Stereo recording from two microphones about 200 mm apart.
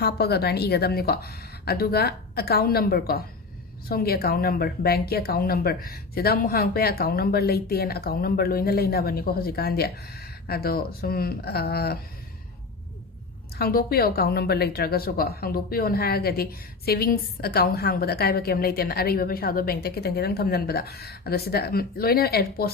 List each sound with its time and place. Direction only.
0.0 s a woman's voice: 55° left (ahead or behind)
13.6 s a woman's voice: 50° left (ahead or behind)